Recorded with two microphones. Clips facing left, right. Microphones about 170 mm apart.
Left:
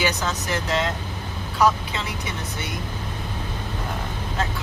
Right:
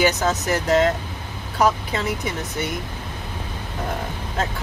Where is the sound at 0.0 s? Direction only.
45° right (ahead or behind).